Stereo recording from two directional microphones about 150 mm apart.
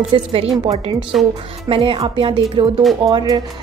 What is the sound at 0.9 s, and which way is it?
Speech, 5° right (ahead or behind).